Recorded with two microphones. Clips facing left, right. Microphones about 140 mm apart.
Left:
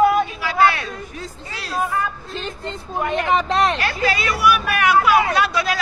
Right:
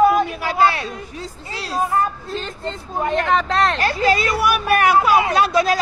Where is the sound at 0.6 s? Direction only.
25° right (ahead or behind).